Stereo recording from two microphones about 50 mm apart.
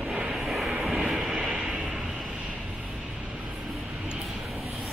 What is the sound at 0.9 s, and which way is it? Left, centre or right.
Train, centre.